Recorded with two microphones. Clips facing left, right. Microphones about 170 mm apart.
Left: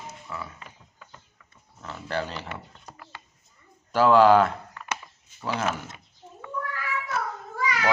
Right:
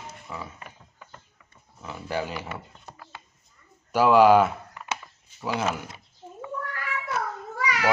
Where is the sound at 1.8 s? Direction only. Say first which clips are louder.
Right 1 dB; 10° right (ahead or behind).